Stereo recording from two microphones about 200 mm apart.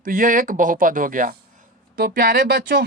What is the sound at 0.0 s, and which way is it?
Speech, 45° right (ahead or behind).